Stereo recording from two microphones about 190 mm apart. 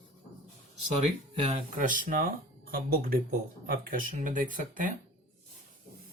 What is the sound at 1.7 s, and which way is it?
Speech, 45° right (ahead or behind).